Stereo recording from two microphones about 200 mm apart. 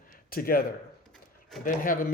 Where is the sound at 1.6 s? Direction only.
40° left (ahead or behind).